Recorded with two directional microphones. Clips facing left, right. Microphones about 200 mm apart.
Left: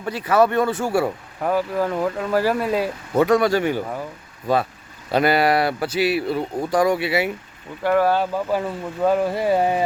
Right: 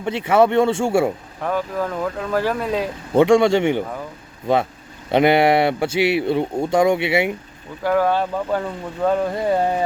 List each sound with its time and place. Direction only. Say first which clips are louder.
0.0 s speech: right 2 dB; 25° right (ahead or behind)
1.4 s speech: left 2 dB; 5° left (ahead or behind)
3.1 s speech: right 4 dB; 25° right (ahead or behind)
5.1 s speech: right 3 dB; 20° right (ahead or behind)
7.9 s speech: even; 5° left (ahead or behind)